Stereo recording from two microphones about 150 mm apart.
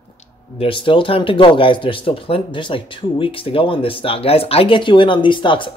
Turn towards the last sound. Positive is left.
turn(degrees=35)  # may be behind; listen again after turning